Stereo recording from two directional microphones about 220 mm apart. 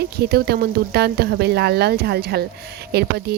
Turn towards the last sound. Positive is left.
turn(degrees=-45)  # may be behind; listen again after turning